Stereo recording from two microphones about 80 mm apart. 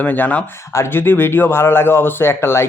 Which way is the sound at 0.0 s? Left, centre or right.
Left.